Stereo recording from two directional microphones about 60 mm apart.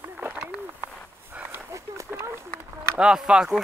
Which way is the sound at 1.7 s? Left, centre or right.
Right.